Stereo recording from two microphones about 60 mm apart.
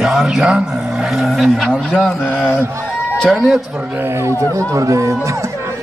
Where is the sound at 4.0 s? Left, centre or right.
Right.